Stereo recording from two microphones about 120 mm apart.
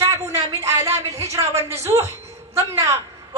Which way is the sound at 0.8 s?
60° right (ahead or behind).